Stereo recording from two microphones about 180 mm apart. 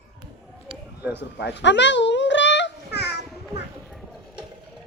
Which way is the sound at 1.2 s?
70° left (ahead or behind).